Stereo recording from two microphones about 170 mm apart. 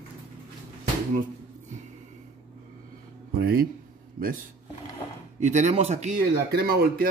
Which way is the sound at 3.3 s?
65° right (ahead or behind).